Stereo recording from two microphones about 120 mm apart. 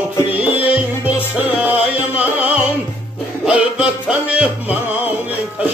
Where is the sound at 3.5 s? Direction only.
10° right (ahead or behind).